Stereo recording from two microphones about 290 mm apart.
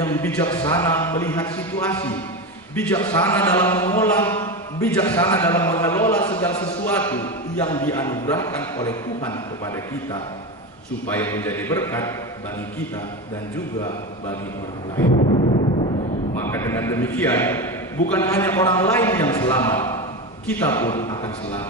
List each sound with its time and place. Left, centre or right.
0.0 s a man's voice: centre
6.5 s a man's voice: centre
6.9 s a man's voice: centre
11.1 s a man's voice: centre
15.1 s a sound: left
16.3 s a man's voice: centre